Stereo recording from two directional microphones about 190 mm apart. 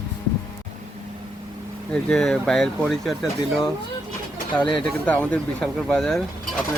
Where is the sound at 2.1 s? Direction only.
Centre (ahead or behind).